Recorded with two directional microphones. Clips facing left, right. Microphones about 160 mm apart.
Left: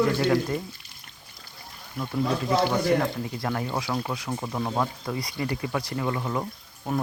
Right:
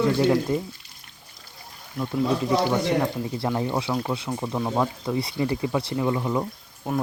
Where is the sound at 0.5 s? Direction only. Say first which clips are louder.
Right 4 dB; 20° right (ahead or behind).